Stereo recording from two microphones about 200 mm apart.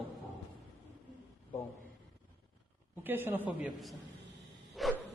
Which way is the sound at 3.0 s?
10° right (ahead or behind).